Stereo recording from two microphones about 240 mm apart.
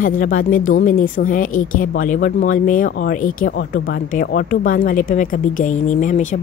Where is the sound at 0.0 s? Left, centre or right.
Left.